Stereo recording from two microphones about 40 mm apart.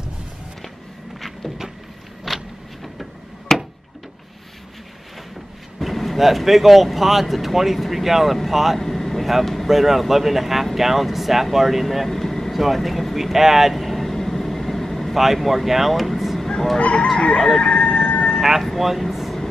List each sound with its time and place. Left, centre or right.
2.2 s a sound: centre
5.8 s speech: centre
8.7 s vehicle: centre
9.7 s speech: centre
11.5 s vehicle: centre
15.1 s speech: centre
16.4 s fowl: centre
16.7 s fowl: left
17.6 s emergency vehicle: left
18.6 s air conditioning: centre